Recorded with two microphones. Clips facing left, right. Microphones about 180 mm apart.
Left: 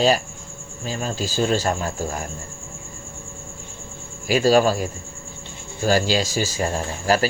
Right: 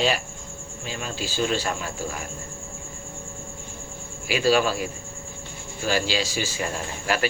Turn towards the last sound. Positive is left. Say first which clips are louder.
# left 5 dB
turn(degrees=40)  # may be behind; listen again after turning